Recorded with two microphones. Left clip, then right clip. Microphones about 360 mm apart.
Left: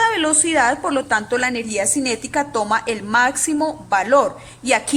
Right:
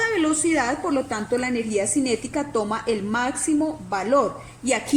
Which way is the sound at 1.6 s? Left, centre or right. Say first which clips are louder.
Left 2 dB; left.